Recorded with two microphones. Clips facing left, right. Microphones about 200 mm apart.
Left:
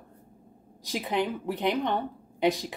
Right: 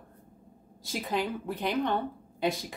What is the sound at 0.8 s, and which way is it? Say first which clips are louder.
A woman's voice: left 3 dB; 15° left (ahead or behind).